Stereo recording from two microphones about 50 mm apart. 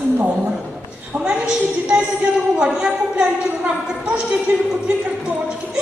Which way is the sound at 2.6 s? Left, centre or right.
Centre.